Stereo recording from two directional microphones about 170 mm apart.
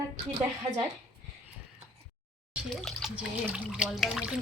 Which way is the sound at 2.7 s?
Centre (ahead or behind).